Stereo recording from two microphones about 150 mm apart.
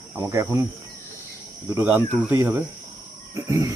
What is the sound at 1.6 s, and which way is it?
Speech, 15° right (ahead or behind).